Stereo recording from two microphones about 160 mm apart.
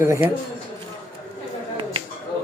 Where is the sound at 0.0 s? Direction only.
15° right (ahead or behind).